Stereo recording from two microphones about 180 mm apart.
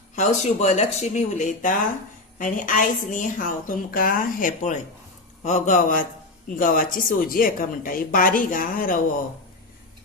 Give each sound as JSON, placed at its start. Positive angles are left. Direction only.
{"t": 0.2, "sound": "a woman's voice", "side_deg": 40}